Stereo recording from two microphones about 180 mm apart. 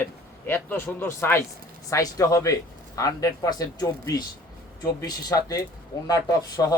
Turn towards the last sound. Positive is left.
turn(degrees=20)  # may be behind; listen again after turning